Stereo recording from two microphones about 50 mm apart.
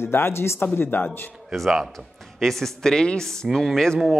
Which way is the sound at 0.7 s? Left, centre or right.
Left.